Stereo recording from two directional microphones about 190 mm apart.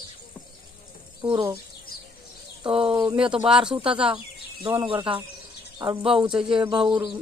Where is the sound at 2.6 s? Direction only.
30° right (ahead or behind).